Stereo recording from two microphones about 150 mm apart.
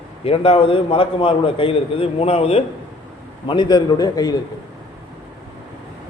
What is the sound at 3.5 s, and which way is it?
Speech, 30° left (ahead or behind).